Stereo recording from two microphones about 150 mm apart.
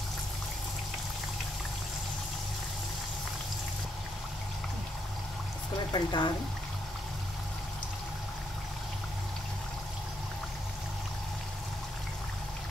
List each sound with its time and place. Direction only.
5.9 s speech: 30° left (ahead or behind)